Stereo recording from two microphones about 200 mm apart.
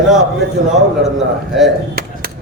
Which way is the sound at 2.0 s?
50° right (ahead or behind).